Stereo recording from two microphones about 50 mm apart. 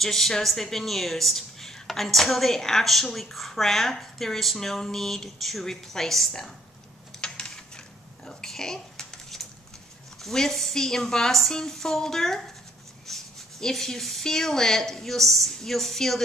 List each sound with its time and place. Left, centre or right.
0.0 s a woman's voice: centre
7.2 s a sound: centre
10.2 s speech: centre